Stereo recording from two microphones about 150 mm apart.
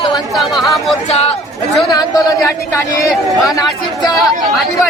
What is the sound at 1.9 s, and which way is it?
Speech, 25° left (ahead or behind).